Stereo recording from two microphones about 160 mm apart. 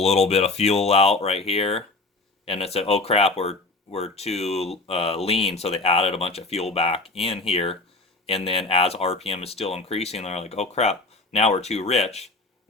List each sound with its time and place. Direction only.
0.0 s speech: 40° left (ahead or behind)